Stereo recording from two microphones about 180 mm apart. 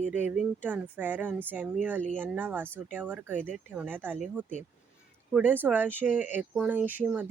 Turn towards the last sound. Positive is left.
turn(degrees=-10)  # may be behind; listen again after turning